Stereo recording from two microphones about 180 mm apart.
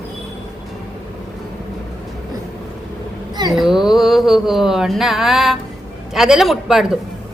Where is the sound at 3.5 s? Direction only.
Centre (ahead or behind).